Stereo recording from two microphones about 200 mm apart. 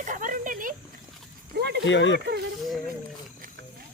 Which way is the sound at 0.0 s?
40° right (ahead or behind).